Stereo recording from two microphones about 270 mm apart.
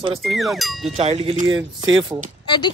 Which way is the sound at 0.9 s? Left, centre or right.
Right.